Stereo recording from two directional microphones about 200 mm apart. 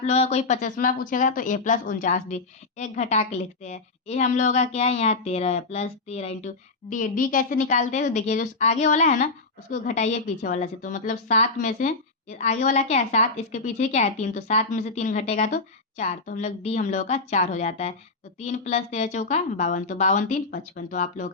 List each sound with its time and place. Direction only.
0.0 s speech: 35° left (ahead or behind)